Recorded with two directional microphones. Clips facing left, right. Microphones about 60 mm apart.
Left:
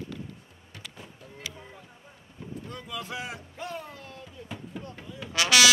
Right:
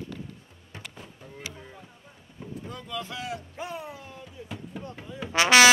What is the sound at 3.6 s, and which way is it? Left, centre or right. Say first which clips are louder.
Music: right 1 dB; centre.